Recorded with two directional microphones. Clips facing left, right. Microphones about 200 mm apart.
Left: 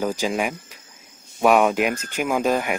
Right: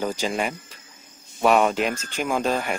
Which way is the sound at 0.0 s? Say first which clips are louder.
Left 2 dB; 10° left (ahead or behind).